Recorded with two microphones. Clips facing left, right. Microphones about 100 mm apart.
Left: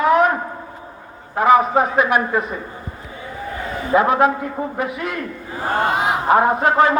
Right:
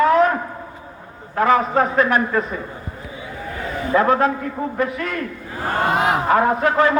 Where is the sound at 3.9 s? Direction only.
15° left (ahead or behind).